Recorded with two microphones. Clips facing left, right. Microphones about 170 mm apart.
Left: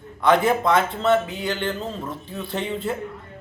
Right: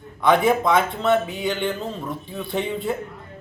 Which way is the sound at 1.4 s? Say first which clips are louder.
Right 2 dB; 15° right (ahead or behind).